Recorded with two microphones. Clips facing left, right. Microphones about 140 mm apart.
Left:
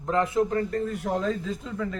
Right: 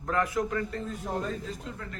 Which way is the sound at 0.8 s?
70° left (ahead or behind).